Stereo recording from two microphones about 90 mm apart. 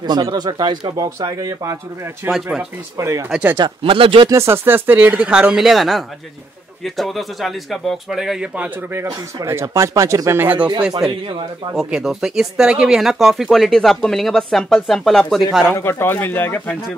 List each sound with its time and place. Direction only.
0.0 s speech: 55° right (ahead or behind)
2.4 s speech: 10° right (ahead or behind)
3.0 s speech: 35° right (ahead or behind)
3.5 s speech: 65° right (ahead or behind)
4.3 s speech: 30° right (ahead or behind); by 8.5 s 5° right (ahead or behind)
9.0 s speech: 40° right (ahead or behind)
10.4 s speech: 20° right (ahead or behind)
11.1 s speech: 80° right
11.7 s speech: 5° right (ahead or behind)
15.6 s speech: 25° left (ahead or behind)